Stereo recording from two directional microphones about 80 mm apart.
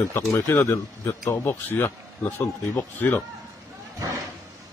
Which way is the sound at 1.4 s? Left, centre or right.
Left.